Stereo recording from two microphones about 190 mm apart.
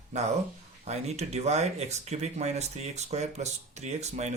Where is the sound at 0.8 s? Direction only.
35° right (ahead or behind).